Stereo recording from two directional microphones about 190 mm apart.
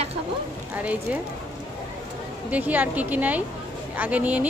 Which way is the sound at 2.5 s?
10° right (ahead or behind).